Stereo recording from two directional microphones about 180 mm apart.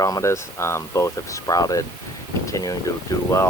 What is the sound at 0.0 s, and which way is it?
Speech, 15° left (ahead or behind).